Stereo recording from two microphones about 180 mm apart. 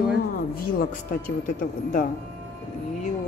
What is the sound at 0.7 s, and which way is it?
Speech, 50° left (ahead or behind).